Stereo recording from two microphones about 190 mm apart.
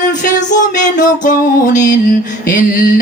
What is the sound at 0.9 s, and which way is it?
Music, 45° left (ahead or behind).